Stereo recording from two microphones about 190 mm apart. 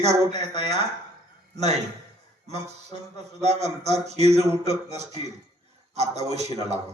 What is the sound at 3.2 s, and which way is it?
Speech, 35° right (ahead or behind).